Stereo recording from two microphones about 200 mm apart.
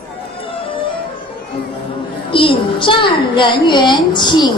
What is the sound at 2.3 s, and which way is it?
A woman's voice, 25° left (ahead or behind).